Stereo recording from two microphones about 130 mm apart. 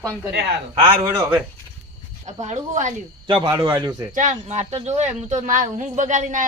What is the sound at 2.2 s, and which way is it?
Speech, 60° right (ahead or behind).